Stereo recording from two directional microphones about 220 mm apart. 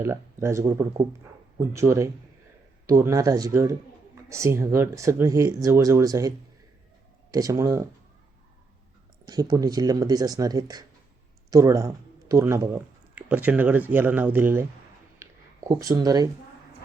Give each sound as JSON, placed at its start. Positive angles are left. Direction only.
{"t": 0.0, "sound": "speech", "side_deg": -10}
{"t": 9.2, "sound": "speech", "side_deg": -20}
{"t": 15.2, "sound": "a sound", "side_deg": -15}